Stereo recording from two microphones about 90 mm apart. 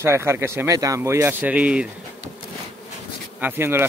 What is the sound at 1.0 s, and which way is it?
Speech, 30° right (ahead or behind).